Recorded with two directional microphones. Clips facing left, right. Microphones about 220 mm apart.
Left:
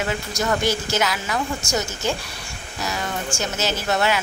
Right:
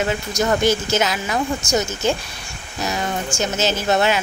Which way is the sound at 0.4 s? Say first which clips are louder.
Right 5 dB; 20° right (ahead or behind).